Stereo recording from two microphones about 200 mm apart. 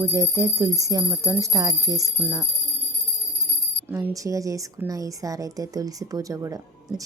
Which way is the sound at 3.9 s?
15° right (ahead or behind).